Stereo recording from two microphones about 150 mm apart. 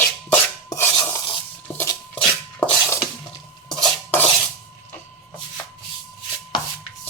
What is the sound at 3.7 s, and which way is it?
Dishes, centre (ahead or behind).